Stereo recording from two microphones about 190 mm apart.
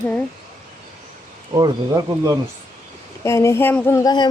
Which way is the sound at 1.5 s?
20° right (ahead or behind).